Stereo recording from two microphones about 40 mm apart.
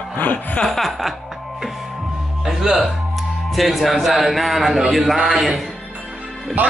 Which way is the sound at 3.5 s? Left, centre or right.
Centre.